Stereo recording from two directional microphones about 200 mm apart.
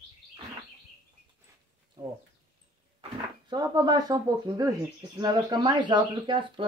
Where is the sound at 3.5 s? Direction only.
20° right (ahead or behind).